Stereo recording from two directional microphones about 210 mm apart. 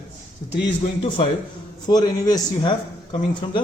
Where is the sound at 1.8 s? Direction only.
20° left (ahead or behind).